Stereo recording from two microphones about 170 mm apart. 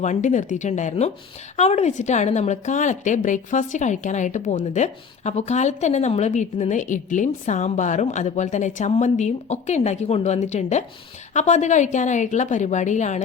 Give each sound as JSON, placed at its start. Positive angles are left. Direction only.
{"t": 0.0, "sound": "a woman's voice", "side_deg": 45}